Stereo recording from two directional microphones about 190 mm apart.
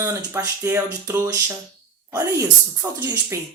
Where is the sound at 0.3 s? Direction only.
15° right (ahead or behind).